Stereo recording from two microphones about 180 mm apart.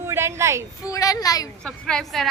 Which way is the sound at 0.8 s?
20° left (ahead or behind).